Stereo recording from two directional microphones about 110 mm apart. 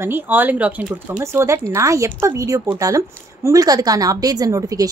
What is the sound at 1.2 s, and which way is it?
A woman's voice, 25° right (ahead or behind).